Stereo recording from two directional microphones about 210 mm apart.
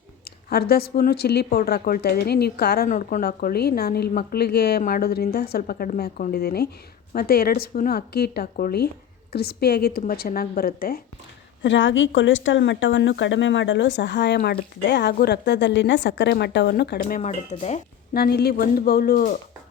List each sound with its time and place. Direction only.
0.5 s a woman's voice: 50° left (ahead or behind)
11.6 s a woman's voice: 60° left (ahead or behind); by 17.7 s 30° left (ahead or behind)
18.1 s a woman's voice: 50° left (ahead or behind)